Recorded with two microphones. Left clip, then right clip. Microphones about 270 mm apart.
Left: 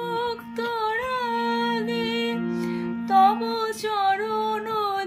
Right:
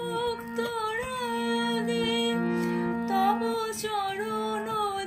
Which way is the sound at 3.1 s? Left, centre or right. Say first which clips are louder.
Left 8 dB; centre.